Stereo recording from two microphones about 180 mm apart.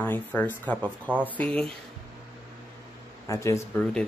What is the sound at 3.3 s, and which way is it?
Speech, 15° left (ahead or behind).